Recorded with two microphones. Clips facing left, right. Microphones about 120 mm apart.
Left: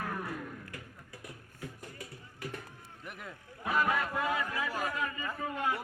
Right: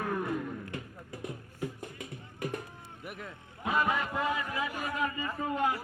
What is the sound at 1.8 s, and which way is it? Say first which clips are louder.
Music: right 4 dB; 20° right (ahead or behind).